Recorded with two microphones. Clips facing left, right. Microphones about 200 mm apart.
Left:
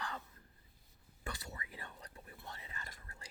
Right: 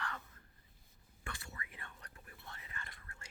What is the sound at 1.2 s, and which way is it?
Whispering, 35° left (ahead or behind).